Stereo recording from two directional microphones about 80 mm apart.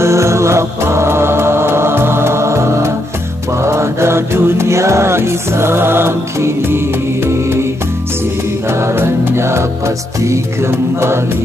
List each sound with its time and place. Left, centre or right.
0.0 s music: right
8.6 s music: right